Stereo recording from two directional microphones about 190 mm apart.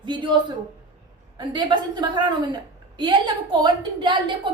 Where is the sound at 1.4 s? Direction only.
25° right (ahead or behind).